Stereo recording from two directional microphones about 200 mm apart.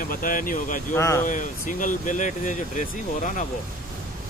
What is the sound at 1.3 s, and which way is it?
Speech, 40° left (ahead or behind).